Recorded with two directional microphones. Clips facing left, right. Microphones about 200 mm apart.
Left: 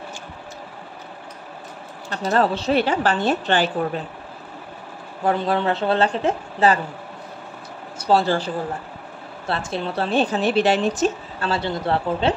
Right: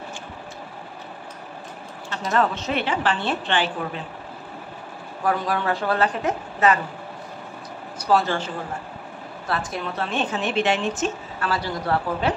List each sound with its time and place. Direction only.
2.0 s a woman's voice: 35° left (ahead or behind)
5.2 s a woman's voice: 25° left (ahead or behind)
8.0 s a woman's voice: 30° left (ahead or behind)
9.5 s a woman's voice: 25° left (ahead or behind)